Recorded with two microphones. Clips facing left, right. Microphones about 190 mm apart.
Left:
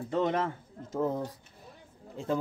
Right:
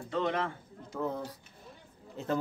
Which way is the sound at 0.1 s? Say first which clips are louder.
Left 3 dB; 40° left (ahead or behind).